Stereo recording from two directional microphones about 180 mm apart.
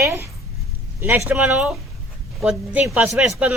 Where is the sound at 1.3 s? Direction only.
10° right (ahead or behind).